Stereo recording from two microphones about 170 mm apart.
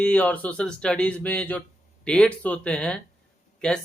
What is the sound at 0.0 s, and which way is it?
Speech, 10° left (ahead or behind).